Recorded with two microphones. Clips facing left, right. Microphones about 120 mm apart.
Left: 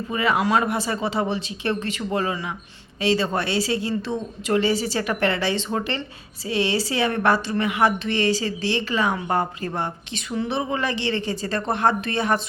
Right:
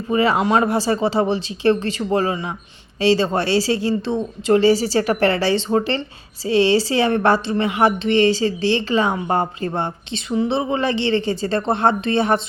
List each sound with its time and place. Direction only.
0.1 s a woman's voice: 30° right (ahead or behind)